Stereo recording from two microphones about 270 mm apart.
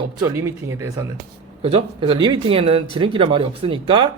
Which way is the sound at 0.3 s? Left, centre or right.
Centre.